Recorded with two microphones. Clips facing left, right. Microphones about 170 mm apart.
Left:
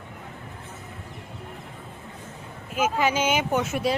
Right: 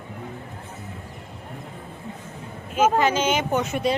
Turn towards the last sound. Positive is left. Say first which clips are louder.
# right 1 dB
turn(degrees=5)  # may be behind; listen again after turning